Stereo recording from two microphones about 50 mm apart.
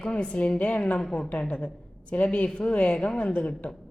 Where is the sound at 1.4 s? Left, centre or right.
Centre.